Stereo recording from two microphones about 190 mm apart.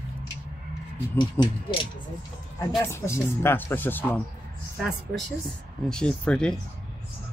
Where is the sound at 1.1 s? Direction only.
20° left (ahead or behind).